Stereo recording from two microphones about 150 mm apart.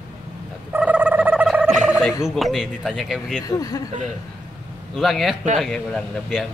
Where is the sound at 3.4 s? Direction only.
25° left (ahead or behind).